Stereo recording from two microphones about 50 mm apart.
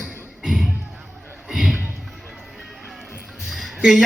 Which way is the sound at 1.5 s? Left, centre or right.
Centre.